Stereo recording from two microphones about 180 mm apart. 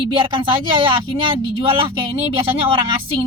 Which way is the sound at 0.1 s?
30° right (ahead or behind).